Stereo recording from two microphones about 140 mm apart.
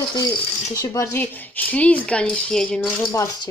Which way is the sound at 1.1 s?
15° left (ahead or behind).